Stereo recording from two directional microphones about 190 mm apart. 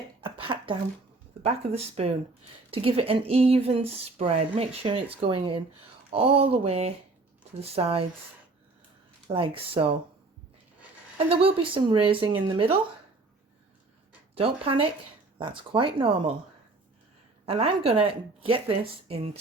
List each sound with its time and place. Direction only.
0.2 s a sound: 25° right (ahead or behind)
1.4 s speech: 30° right (ahead or behind)
9.3 s speech: 30° right (ahead or behind)
11.3 s speech: 30° right (ahead or behind)
14.3 s speech: 30° right (ahead or behind)
17.4 s speech: 30° right (ahead or behind)